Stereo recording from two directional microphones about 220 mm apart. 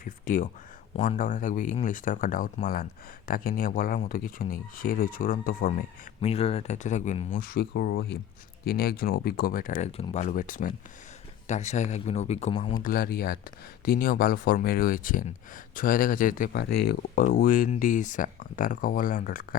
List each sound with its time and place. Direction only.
0.0 s a sound: 35° left (ahead or behind)
0.9 s speech: 30° left (ahead or behind)
6.2 s speech: 25° left (ahead or behind)
12.8 s speech: 40° left (ahead or behind)
17.2 s speech: 35° left (ahead or behind)